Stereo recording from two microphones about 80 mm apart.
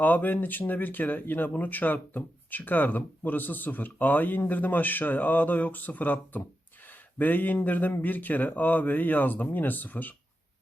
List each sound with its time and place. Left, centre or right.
0.0 s speech: left